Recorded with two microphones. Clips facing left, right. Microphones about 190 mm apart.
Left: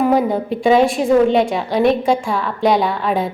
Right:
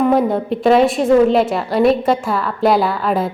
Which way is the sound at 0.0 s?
Centre (ahead or behind).